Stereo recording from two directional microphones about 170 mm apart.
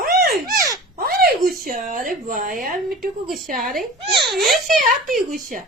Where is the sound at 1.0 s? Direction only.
60° right (ahead or behind).